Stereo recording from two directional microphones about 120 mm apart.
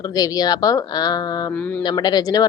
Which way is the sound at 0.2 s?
35° left (ahead or behind).